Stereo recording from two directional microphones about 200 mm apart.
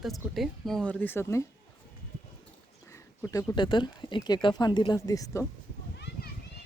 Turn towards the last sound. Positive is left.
turn(degrees=15)  # may be behind; listen again after turning